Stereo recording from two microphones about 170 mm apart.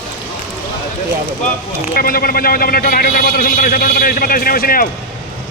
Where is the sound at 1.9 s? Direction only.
60° left (ahead or behind).